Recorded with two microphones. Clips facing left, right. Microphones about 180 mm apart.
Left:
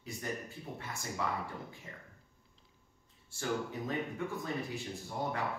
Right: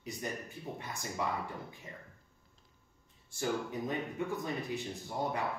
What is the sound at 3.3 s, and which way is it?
A man's voice, 20° right (ahead or behind).